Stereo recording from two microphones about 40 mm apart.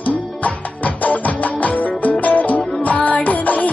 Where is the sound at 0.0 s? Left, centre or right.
Left.